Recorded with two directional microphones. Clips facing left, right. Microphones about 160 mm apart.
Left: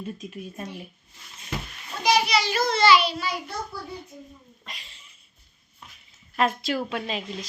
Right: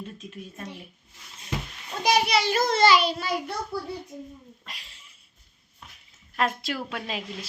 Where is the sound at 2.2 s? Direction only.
55° right (ahead or behind).